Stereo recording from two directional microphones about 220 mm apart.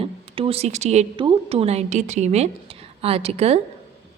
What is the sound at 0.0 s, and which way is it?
A woman's voice, 25° right (ahead or behind).